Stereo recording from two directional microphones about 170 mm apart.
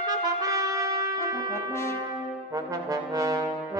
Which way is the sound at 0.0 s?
20° right (ahead or behind).